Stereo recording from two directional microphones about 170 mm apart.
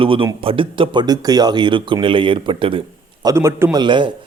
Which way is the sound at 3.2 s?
15° right (ahead or behind).